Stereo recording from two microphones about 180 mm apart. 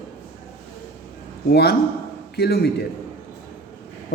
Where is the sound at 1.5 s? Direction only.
65° left (ahead or behind).